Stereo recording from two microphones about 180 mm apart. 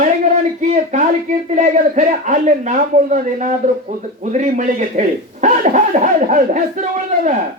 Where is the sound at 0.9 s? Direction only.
40° right (ahead or behind).